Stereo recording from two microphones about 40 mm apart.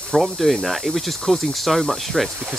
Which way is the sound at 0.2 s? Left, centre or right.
Centre.